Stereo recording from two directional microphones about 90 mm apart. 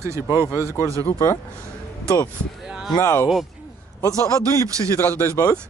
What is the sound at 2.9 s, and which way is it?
A man's voice, 40° left (ahead or behind).